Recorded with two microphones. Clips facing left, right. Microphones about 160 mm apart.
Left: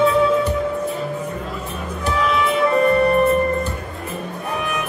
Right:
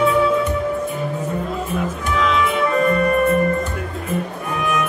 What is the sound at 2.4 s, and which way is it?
Music, 30° left (ahead or behind).